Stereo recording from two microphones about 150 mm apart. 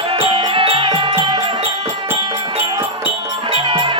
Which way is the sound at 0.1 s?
40° right (ahead or behind).